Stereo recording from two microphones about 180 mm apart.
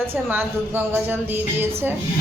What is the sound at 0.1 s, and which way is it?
A woman's voice, 10° right (ahead or behind).